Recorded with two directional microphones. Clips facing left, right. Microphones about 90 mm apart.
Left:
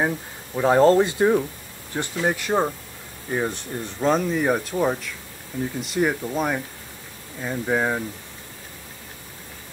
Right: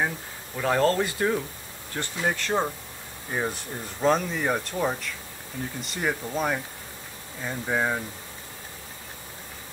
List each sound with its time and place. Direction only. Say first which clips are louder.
0.6 s speech: left 7 dB; 25° left (ahead or behind)
3.3 s speech: left 4 dB; centre (ahead or behind)